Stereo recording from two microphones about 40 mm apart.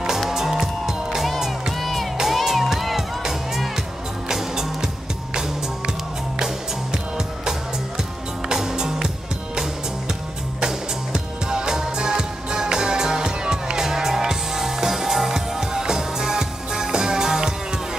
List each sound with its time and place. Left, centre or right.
0.3 s music: centre
1.7 s music: centre
6.4 s music: centre
11.1 s music: centre